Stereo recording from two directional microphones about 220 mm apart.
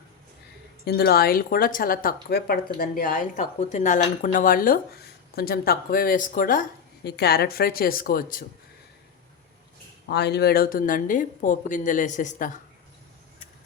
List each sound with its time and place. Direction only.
0.9 s speech: 45° left (ahead or behind)
10.1 s speech: 50° left (ahead or behind)